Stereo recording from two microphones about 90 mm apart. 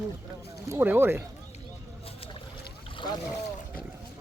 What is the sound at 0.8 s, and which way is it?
Speech, 25° right (ahead or behind).